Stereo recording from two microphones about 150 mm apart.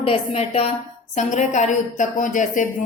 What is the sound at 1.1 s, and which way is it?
Speech, 50° left (ahead or behind).